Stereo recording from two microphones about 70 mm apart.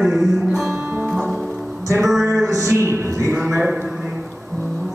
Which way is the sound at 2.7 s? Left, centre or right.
Right.